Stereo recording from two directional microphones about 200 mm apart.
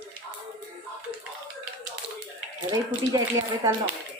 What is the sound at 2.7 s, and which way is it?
Speech, 15° right (ahead or behind).